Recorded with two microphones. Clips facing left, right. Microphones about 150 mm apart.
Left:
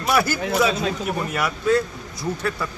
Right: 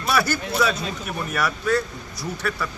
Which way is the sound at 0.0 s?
20° left (ahead or behind).